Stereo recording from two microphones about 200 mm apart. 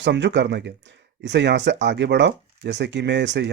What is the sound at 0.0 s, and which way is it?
Speech, 60° right (ahead or behind).